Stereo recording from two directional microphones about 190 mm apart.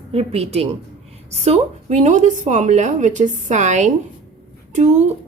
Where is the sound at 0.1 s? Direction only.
30° right (ahead or behind).